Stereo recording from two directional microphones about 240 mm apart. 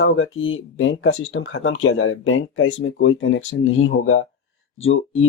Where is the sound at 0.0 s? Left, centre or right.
Left.